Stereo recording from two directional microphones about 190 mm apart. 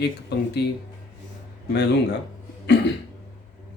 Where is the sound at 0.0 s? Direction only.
60° left (ahead or behind).